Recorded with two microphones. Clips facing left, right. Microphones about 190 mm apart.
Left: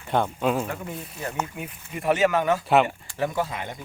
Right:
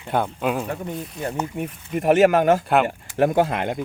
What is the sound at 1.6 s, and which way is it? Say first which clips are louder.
Speech: right 7 dB; 45° right (ahead or behind).